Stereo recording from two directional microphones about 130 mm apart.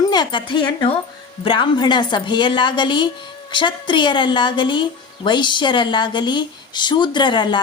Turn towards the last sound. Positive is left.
turn(degrees=35)  # may be behind; listen again after turning